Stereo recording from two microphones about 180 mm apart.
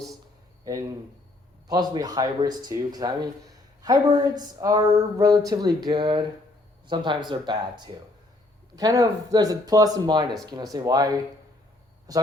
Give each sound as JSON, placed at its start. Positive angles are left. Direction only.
{"t": 1.6, "sound": "speech", "side_deg": -25}
{"t": 4.4, "sound": "speech", "side_deg": -20}